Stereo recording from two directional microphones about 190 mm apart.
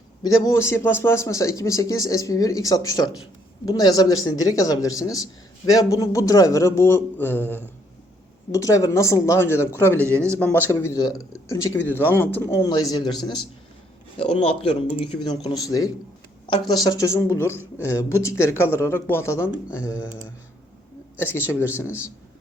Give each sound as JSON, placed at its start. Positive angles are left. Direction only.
{"t": 0.2, "sound": "a man's voice", "side_deg": 15}
{"t": 10.1, "sound": "speech", "side_deg": -15}
{"t": 10.4, "sound": "a man's voice", "side_deg": 10}
{"t": 21.2, "sound": "a man's voice", "side_deg": 10}